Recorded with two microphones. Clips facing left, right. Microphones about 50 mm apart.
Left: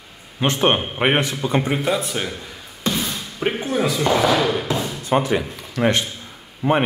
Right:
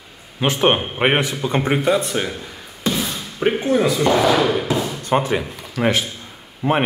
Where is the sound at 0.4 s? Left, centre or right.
Centre.